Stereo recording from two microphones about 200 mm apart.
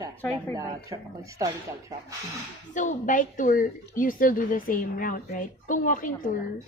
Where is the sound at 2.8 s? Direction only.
40° left (ahead or behind).